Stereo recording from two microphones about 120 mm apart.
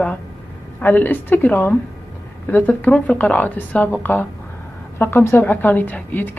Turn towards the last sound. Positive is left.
turn(degrees=15)  # may be behind; listen again after turning